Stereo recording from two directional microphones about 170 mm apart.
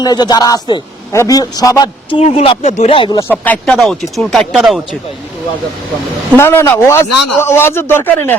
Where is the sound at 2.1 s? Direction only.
35° left (ahead or behind).